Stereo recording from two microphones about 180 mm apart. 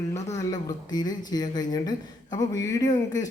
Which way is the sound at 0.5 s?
20° left (ahead or behind).